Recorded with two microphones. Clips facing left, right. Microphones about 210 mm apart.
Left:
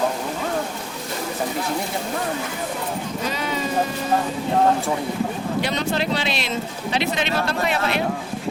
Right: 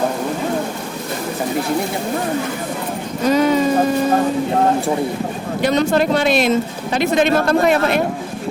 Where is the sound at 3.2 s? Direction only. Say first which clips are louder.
Right 14 dB; 45° right (ahead or behind).